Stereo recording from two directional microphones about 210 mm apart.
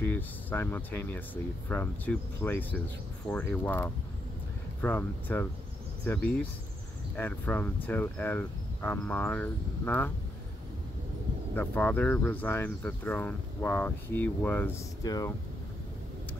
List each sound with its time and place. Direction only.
0.0 s speech: 10° left (ahead or behind)
7.2 s speech: 10° left (ahead or behind)
11.5 s speech: 10° left (ahead or behind)